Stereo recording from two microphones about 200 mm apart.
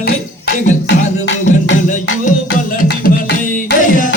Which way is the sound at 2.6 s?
45° left (ahead or behind).